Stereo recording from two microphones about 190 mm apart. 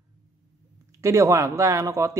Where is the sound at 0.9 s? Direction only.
15° right (ahead or behind).